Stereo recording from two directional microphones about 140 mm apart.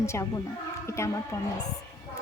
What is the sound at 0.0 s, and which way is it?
Speech, 20° left (ahead or behind).